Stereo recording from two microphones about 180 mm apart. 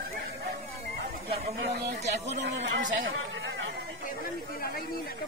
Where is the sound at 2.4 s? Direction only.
85° right.